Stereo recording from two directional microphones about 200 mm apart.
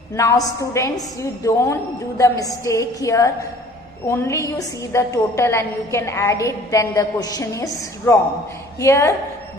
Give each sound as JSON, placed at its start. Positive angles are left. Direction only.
{"t": 0.1, "sound": "a woman's voice", "side_deg": 15}